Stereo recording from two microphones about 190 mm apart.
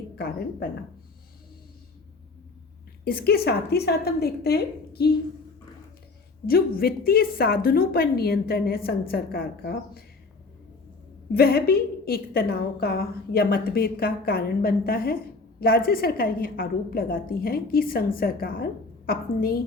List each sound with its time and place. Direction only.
0.2 s a woman's voice: 55° left (ahead or behind)
3.0 s a woman's voice: 50° left (ahead or behind)
6.4 s a woman's voice: 50° left (ahead or behind)
11.3 s a woman's voice: 55° left (ahead or behind)